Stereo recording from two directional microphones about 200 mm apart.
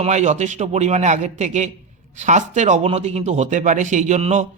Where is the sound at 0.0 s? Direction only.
35° right (ahead or behind).